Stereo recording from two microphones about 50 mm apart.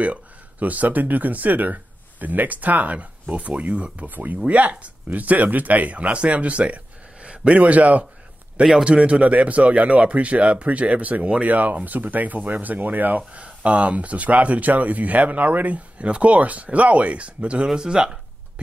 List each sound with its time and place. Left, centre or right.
0.0 s speech: right